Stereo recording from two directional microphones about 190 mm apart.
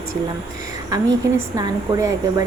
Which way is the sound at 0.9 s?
20° right (ahead or behind).